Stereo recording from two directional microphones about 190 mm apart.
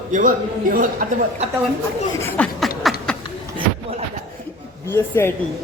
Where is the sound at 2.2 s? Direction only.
5° left (ahead or behind).